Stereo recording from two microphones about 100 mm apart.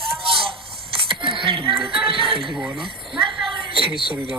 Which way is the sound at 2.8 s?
60° right (ahead or behind).